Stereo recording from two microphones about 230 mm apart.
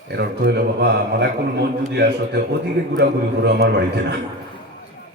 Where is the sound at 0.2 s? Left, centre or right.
Right.